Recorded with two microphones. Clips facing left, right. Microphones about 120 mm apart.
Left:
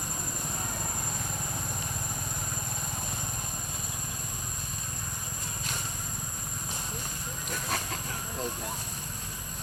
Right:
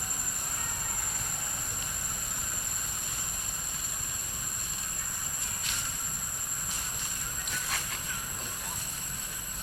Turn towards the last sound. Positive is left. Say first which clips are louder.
# left 5 dB
turn(degrees=40)  # may be behind; listen again after turning